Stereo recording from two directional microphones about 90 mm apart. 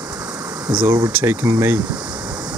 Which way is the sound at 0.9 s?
30° right (ahead or behind).